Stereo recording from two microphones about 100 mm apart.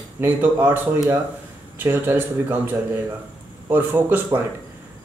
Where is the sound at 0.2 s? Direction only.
20° right (ahead or behind).